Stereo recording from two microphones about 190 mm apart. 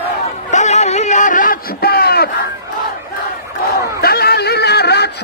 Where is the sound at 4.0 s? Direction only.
55° left (ahead or behind).